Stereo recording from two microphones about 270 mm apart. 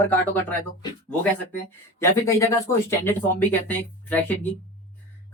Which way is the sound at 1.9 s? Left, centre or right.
Centre.